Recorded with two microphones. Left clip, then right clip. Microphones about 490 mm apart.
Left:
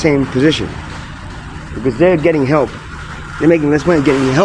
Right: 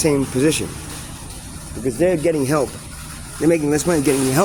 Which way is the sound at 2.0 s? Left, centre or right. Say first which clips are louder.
Left 6 dB; right.